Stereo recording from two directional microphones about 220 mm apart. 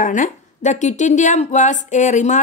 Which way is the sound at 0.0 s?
35° left (ahead or behind).